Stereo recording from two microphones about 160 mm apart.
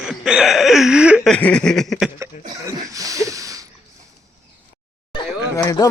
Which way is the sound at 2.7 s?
20° right (ahead or behind).